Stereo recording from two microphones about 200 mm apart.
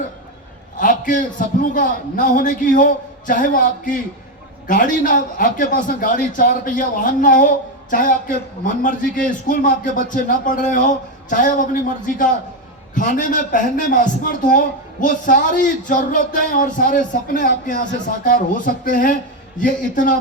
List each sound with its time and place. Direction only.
0.8 s a man's voice: 40° left (ahead or behind)